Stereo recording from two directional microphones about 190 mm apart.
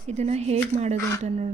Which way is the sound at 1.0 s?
15° left (ahead or behind).